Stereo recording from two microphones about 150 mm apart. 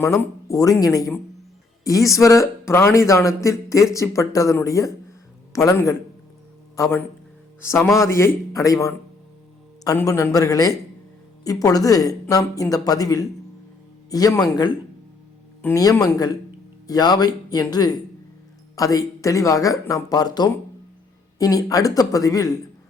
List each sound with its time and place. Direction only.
0.0 s a man's voice: 15° left (ahead or behind)